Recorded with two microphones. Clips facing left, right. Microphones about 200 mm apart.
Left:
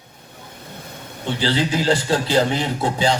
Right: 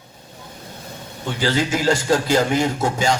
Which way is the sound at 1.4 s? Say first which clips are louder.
Right 1 dB; 45° right (ahead or behind).